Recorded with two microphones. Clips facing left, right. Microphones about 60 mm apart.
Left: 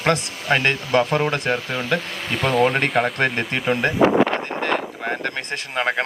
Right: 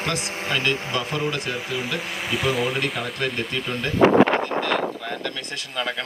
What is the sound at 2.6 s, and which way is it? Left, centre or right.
Speech, left.